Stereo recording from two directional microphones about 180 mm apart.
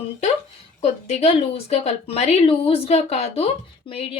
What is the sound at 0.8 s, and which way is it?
Speech, 35° left (ahead or behind).